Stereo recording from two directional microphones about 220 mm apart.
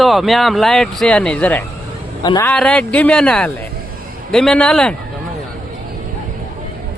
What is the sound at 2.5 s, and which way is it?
A man's voice, 5° left (ahead or behind).